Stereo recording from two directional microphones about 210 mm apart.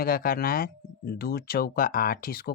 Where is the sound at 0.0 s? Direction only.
45° left (ahead or behind).